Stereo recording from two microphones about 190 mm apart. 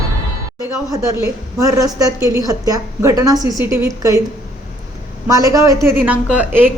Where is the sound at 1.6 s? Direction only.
15° right (ahead or behind).